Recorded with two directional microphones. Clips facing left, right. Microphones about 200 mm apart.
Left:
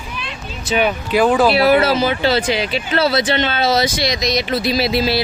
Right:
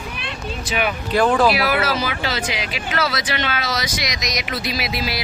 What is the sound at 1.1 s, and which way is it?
Speech, 5° left (ahead or behind).